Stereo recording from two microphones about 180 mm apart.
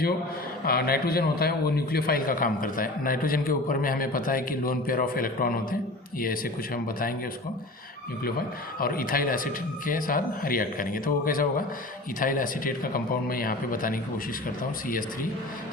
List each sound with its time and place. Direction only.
0.6 s a man's voice: 55° left (ahead or behind)
8.8 s a man's voice: 55° left (ahead or behind)